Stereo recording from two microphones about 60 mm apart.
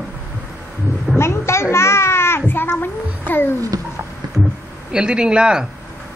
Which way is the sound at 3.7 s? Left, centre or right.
Right.